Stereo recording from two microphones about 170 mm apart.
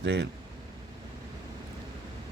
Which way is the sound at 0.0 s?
85° right.